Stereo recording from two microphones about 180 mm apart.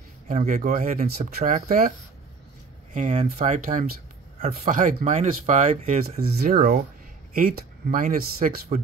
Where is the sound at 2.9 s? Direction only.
40° right (ahead or behind).